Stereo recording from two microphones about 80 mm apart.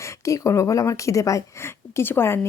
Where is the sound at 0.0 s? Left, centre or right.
Left.